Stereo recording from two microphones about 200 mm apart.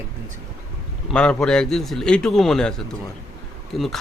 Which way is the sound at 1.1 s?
5° left (ahead or behind).